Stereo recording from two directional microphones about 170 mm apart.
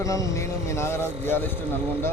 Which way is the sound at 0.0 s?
20° left (ahead or behind).